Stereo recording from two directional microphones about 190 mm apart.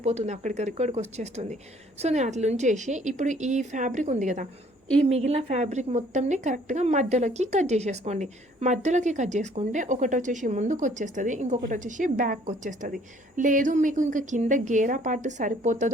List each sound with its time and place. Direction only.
0.0 s a woman's voice: 35° right (ahead or behind)